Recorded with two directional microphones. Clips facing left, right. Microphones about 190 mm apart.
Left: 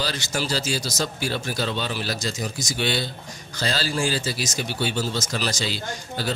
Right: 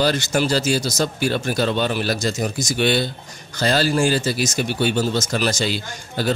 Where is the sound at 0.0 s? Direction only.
55° right (ahead or behind).